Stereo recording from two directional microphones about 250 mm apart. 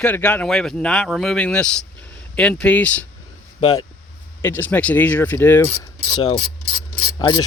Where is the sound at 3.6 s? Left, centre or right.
Centre.